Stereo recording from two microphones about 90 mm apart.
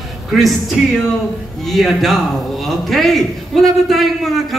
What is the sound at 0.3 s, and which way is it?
A man's voice, centre (ahead or behind).